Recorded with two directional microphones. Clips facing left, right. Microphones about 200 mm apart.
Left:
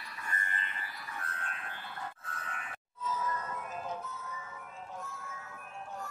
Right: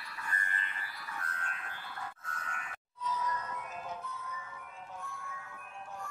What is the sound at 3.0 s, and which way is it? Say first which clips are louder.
Music: even; 45° left (ahead or behind).